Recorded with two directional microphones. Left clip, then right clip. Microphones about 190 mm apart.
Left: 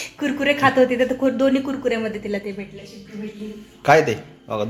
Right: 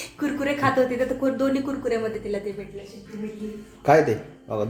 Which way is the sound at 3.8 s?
Centre (ahead or behind).